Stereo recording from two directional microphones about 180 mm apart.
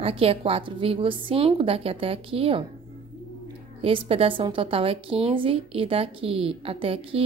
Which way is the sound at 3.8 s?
30° right (ahead or behind).